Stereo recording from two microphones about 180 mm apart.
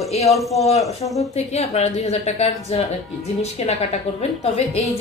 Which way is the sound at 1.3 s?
35° left (ahead or behind).